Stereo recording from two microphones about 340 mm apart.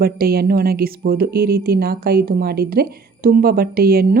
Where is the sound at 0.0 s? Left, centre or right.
Right.